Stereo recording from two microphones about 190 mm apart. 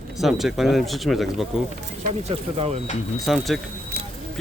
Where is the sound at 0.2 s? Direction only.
Centre (ahead or behind).